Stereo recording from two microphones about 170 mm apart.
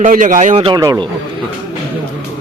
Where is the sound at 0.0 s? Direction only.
50° right (ahead or behind).